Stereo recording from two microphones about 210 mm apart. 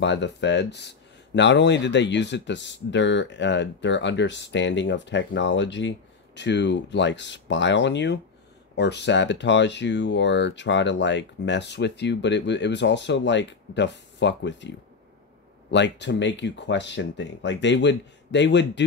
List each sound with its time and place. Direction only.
0.0 s speech: 55° left (ahead or behind)
15.7 s speech: 55° left (ahead or behind)